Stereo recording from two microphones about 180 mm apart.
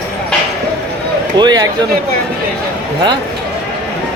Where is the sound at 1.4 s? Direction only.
25° right (ahead or behind).